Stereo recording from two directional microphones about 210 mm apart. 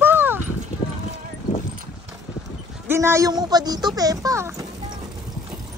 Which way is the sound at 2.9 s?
10° right (ahead or behind).